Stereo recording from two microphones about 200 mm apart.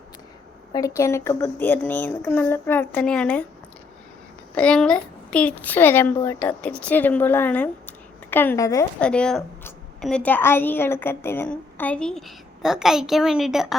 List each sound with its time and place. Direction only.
0.7 s a woman's voice: 15° left (ahead or behind)
4.5 s a woman's voice: 5° left (ahead or behind)
9.0 s a woman's voice: 5° left (ahead or behind)